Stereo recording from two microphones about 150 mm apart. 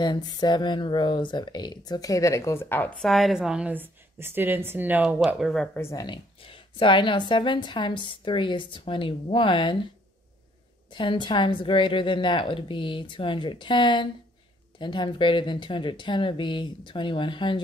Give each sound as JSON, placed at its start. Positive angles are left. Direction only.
{"t": 0.0, "sound": "speech", "side_deg": 30}
{"t": 3.0, "sound": "a woman's voice", "side_deg": 0}
{"t": 5.8, "sound": "speech", "side_deg": 20}
{"t": 6.0, "sound": "a woman's voice", "side_deg": 35}
{"t": 10.9, "sound": "a woman's voice", "side_deg": 30}